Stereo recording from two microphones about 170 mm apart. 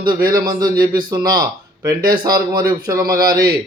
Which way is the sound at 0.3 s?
25° right (ahead or behind).